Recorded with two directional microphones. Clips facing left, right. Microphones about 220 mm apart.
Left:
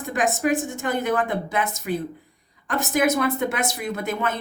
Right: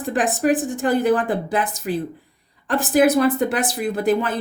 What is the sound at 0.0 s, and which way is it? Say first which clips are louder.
A woman's voice: right 3 dB; 35° right (ahead or behind).